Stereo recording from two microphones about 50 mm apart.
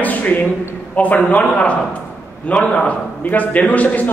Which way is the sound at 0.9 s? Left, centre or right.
Left.